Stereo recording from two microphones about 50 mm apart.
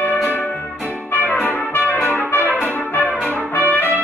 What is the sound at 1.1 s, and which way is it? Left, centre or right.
Trumpet, left.